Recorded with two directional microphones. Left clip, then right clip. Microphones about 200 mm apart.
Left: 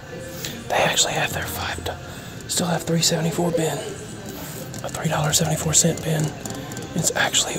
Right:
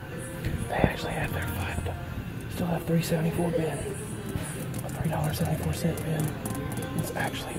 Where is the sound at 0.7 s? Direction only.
25° left (ahead or behind).